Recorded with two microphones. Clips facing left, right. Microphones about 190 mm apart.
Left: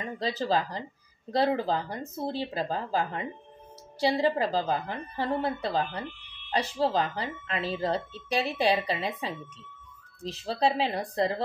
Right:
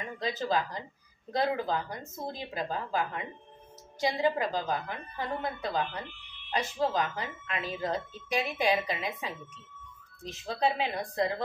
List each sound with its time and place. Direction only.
0.2 s speech: 35° left (ahead or behind)